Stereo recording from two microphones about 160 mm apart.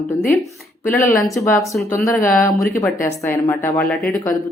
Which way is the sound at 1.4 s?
20° left (ahead or behind).